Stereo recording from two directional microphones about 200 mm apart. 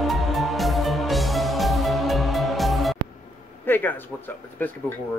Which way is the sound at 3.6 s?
10° left (ahead or behind).